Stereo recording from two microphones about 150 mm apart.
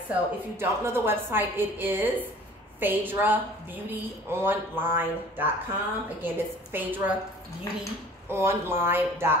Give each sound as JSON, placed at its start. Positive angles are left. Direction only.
{"t": 0.1, "sound": "a woman's voice", "side_deg": -15}
{"t": 8.3, "sound": "a woman's voice", "side_deg": -15}